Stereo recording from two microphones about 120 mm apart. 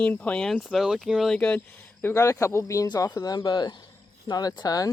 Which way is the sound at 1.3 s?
10° left (ahead or behind).